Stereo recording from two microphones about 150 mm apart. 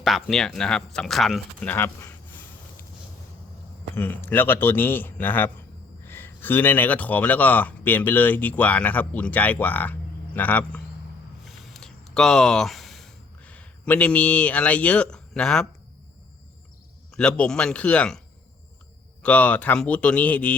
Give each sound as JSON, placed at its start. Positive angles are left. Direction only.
{"t": 0.0, "sound": "speech", "side_deg": 0}
{"t": 3.9, "sound": "speech", "side_deg": 15}
{"t": 11.4, "sound": "a sound", "side_deg": 0}
{"t": 17.2, "sound": "speech", "side_deg": 5}
{"t": 19.2, "sound": "speech", "side_deg": 10}